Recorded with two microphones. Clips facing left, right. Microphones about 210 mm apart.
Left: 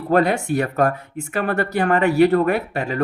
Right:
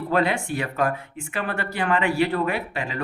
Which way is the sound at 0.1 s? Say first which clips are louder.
Left 6 dB; 45° left (ahead or behind).